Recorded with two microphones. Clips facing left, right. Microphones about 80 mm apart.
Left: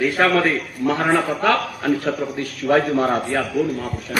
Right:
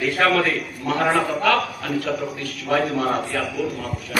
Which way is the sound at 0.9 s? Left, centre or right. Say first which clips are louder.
Left 1 dB; left.